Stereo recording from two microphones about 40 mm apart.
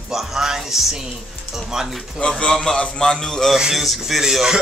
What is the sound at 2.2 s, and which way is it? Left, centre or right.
A man's voice, centre.